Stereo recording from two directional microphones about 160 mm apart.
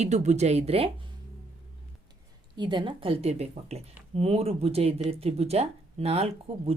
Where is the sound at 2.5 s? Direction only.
30° right (ahead or behind).